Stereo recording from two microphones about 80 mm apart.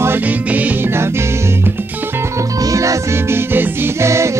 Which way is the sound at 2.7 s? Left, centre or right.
Right.